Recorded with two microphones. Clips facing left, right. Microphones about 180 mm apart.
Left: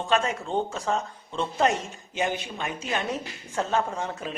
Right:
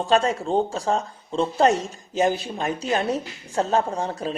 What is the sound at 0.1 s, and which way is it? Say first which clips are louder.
Speech: right 5 dB; 35° right (ahead or behind).